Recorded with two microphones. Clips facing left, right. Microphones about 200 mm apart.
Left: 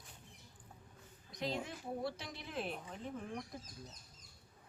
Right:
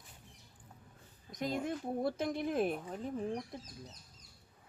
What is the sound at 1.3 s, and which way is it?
Speech, 45° right (ahead or behind).